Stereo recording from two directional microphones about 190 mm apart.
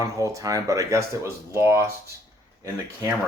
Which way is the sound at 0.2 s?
15° right (ahead or behind).